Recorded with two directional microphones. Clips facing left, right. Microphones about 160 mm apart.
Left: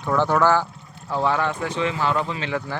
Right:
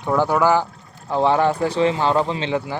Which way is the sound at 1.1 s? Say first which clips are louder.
Right 5 dB; 30° right (ahead or behind).